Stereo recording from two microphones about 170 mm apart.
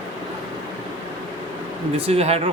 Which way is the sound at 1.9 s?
35° right (ahead or behind).